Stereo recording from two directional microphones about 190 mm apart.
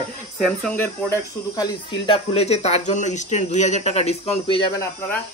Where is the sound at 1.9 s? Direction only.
30° left (ahead or behind).